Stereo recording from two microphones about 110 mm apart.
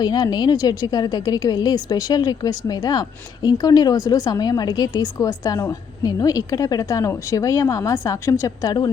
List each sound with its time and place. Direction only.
0.0 s a woman's voice: 40° left (ahead or behind)